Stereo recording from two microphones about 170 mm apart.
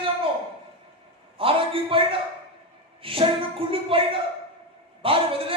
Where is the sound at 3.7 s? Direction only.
35° right (ahead or behind).